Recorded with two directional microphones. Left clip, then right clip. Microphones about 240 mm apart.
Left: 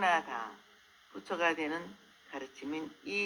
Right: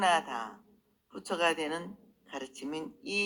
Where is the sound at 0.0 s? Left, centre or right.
Right.